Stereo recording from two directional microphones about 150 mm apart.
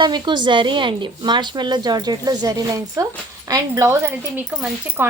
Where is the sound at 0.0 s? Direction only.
30° right (ahead or behind).